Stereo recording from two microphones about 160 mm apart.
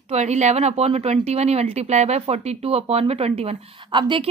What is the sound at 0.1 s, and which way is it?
Speech, 45° right (ahead or behind).